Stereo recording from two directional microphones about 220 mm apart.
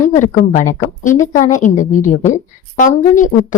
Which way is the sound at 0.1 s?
35° left (ahead or behind).